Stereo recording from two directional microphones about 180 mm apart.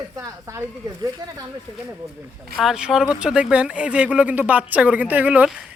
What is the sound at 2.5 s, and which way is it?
Speech, centre (ahead or behind).